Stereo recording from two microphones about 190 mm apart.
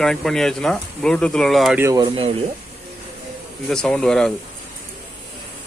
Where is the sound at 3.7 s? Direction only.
5° left (ahead or behind).